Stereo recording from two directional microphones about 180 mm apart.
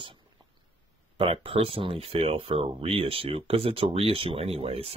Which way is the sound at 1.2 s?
30° right (ahead or behind).